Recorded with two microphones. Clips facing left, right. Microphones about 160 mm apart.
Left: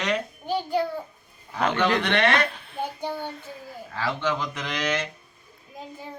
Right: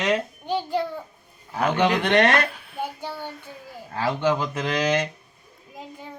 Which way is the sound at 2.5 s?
5° right (ahead or behind).